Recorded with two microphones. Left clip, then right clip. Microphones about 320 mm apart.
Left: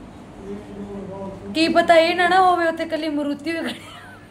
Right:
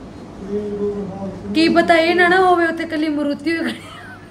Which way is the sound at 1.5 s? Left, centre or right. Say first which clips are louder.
Right 2 dB; centre.